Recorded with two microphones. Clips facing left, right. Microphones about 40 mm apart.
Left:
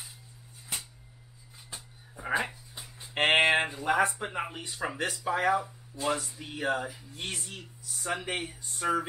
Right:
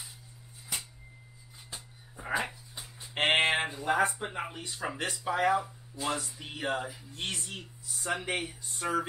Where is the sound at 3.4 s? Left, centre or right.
Centre.